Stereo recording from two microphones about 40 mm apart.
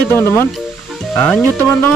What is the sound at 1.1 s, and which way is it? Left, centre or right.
Speech, left.